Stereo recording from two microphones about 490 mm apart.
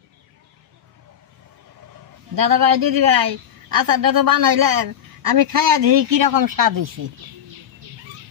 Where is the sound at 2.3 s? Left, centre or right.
Right.